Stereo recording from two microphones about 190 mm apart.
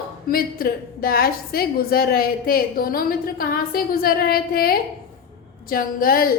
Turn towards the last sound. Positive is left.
turn(degrees=50)  # may be behind; listen again after turning